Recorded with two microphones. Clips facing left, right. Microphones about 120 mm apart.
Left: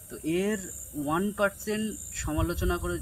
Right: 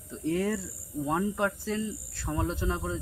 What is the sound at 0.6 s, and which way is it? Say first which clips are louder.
Speech: left 1 dB; 5° left (ahead or behind).